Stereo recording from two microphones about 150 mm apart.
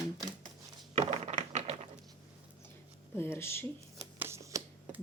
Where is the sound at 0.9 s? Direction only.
50° right (ahead or behind).